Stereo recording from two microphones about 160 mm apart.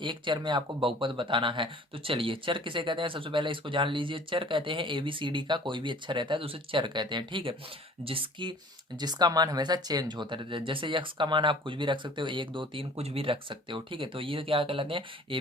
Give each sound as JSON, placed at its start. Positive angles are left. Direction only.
{"t": 0.0, "sound": "speech", "side_deg": -30}